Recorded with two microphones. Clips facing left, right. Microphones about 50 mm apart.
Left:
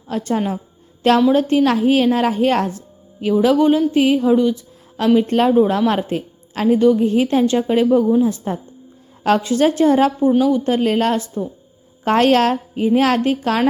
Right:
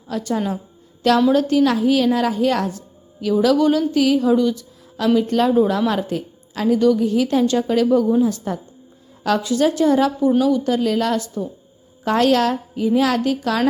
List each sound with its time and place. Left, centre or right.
0.1 s a woman's voice: left
6.7 s a woman's voice: left